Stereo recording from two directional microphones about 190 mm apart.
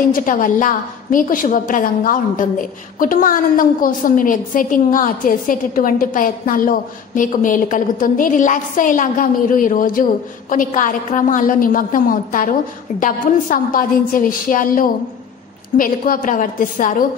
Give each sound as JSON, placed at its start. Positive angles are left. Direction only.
{"t": 0.1, "sound": "a woman's voice", "side_deg": 45}